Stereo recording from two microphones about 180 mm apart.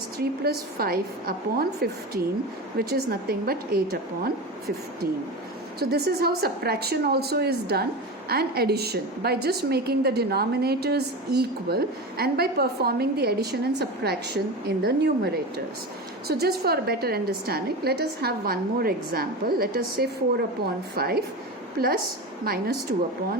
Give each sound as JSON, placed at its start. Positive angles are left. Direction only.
{"t": 0.2, "sound": "a woman's voice", "side_deg": -60}
{"t": 5.8, "sound": "a woman's voice", "side_deg": -60}